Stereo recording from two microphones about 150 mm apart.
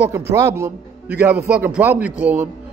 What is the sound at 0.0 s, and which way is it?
A man's voice, 20° right (ahead or behind).